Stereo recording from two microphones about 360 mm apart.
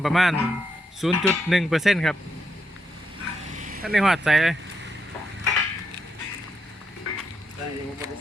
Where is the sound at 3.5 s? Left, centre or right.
Right.